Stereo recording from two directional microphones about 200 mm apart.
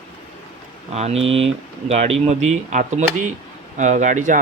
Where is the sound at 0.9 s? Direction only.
30° right (ahead or behind).